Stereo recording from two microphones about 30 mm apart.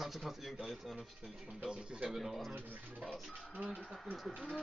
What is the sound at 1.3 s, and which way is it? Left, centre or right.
Speech, centre.